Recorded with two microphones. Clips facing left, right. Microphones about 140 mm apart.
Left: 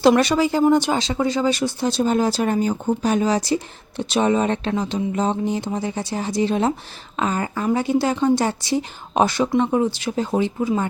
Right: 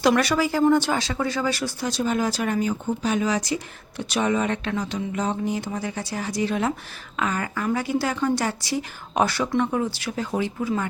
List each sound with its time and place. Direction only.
0.0 s speech: 25° left (ahead or behind)